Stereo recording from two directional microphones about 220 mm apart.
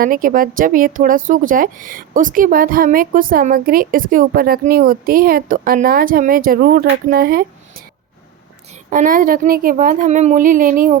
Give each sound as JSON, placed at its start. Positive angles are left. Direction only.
{"t": 0.0, "sound": "a woman's voice", "side_deg": -40}
{"t": 8.7, "sound": "a woman's voice", "side_deg": -35}